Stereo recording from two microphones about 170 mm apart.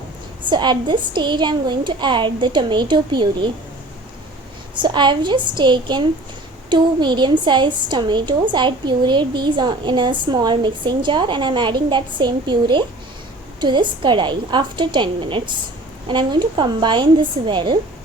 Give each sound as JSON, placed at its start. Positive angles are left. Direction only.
{"t": 0.5, "sound": "a woman's voice", "side_deg": -25}
{"t": 4.7, "sound": "a woman's voice", "side_deg": -25}